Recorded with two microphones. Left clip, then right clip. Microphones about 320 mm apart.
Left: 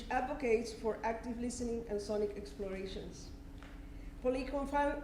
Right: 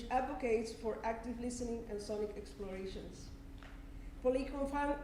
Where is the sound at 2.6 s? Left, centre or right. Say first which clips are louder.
Left 5 dB; left.